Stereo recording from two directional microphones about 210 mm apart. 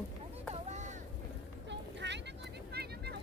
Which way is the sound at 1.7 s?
55° right (ahead or behind).